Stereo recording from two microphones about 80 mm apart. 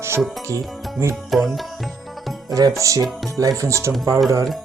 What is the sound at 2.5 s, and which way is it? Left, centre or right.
Speech, right.